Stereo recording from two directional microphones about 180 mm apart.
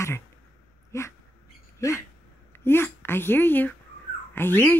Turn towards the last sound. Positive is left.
turn(degrees=10)  # may be behind; listen again after turning